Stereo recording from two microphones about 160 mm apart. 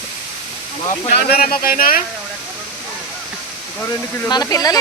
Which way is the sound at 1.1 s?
70° left (ahead or behind).